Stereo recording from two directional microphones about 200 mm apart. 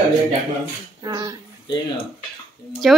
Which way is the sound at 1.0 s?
15° right (ahead or behind).